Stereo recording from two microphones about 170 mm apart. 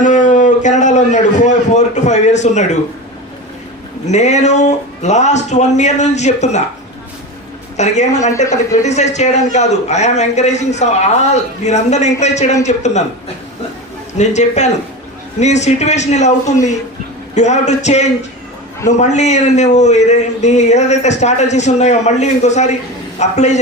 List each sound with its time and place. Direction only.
0.0 s a man's voice: 50° left (ahead or behind)
4.0 s a man's voice: 40° left (ahead or behind)
7.8 s a man's voice: 45° left (ahead or behind)
14.2 s a man's voice: 45° left (ahead or behind)